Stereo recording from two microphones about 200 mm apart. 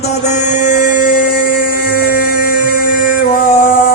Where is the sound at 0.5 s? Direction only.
40° left (ahead or behind).